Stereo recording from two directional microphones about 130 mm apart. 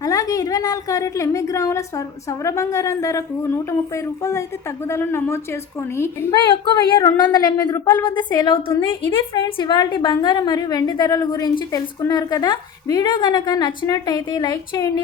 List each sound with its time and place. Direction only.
0.0 s a woman's voice: 25° left (ahead or behind)
6.3 s a woman's voice: 35° left (ahead or behind)